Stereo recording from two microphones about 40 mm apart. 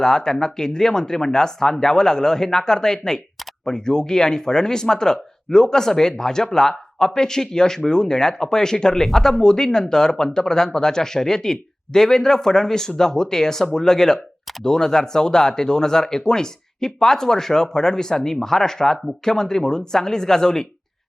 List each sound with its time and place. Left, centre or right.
0.0 s speech: centre